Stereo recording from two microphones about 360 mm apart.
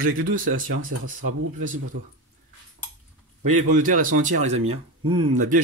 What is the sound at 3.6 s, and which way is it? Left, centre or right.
Speech, right.